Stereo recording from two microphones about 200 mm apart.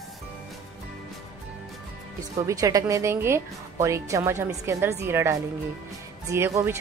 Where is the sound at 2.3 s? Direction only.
15° right (ahead or behind).